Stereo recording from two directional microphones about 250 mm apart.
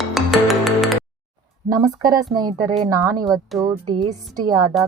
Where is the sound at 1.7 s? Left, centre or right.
Centre.